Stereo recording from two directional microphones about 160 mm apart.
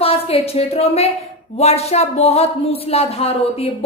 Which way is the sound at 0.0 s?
40° left (ahead or behind).